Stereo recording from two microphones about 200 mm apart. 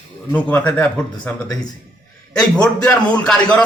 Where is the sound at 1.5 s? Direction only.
20° left (ahead or behind).